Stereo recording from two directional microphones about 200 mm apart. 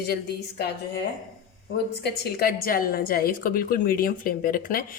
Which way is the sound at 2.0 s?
50° left (ahead or behind).